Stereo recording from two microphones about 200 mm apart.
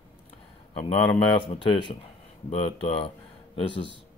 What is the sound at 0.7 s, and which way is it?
A man's voice, 25° left (ahead or behind).